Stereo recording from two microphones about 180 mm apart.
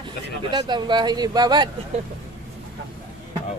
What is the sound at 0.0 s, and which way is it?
Speech, 25° right (ahead or behind).